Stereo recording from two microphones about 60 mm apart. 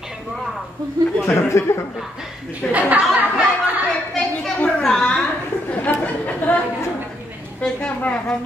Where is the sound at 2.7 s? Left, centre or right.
Right.